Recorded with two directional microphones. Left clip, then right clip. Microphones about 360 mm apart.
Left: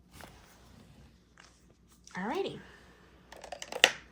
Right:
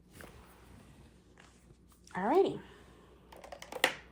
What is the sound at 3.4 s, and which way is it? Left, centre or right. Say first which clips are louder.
Computer keyboard: left 6 dB; left.